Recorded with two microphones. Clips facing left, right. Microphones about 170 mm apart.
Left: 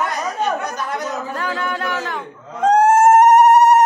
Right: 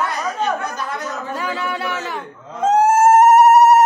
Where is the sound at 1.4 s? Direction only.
10° right (ahead or behind).